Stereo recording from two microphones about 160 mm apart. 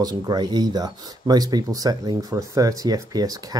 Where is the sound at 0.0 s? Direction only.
25° right (ahead or behind).